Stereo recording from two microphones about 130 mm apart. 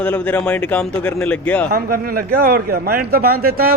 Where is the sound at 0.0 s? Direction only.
10° left (ahead or behind).